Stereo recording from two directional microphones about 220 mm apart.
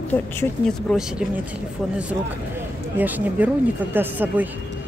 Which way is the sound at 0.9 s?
5° right (ahead or behind).